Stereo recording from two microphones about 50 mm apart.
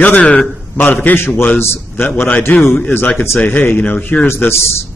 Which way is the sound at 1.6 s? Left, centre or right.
Left.